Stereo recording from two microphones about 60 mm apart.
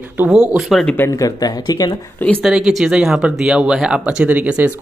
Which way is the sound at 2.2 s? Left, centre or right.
Left.